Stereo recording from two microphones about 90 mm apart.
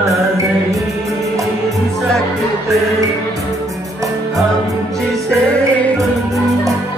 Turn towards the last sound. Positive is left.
turn(degrees=15)  # may be behind; listen again after turning